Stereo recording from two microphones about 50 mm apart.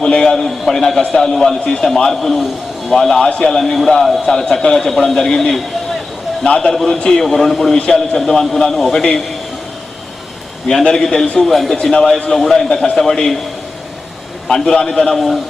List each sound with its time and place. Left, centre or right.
0.0 s a sound: centre
0.4 s a man's voice: centre
6.4 s a man's voice: centre
10.7 s a man's voice: centre
14.4 s a man's voice: centre